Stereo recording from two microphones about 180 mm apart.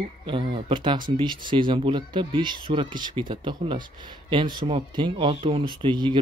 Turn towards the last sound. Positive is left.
turn(degrees=-25)  # may be behind; listen again after turning